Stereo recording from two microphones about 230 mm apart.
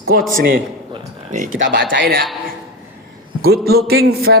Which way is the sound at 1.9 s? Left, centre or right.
Right.